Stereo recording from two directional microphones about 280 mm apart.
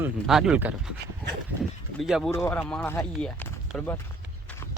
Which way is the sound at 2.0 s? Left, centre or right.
Centre.